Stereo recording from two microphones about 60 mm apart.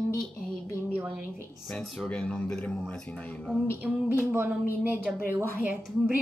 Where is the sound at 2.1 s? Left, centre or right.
Centre.